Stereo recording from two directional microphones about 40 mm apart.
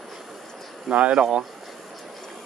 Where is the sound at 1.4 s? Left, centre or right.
Centre.